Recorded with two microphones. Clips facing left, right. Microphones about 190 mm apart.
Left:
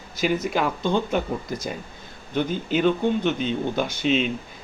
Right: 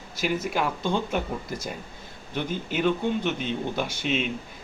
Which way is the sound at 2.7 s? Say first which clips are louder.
Left 4 dB; 5° right (ahead or behind).